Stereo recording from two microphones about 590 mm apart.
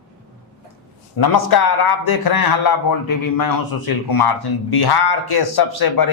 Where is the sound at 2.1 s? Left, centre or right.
Left.